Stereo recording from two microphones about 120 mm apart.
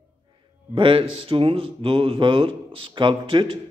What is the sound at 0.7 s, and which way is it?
A man's voice, 45° right (ahead or behind).